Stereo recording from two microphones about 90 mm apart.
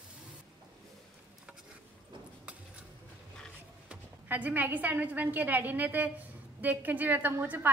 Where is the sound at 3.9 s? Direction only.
15° right (ahead or behind).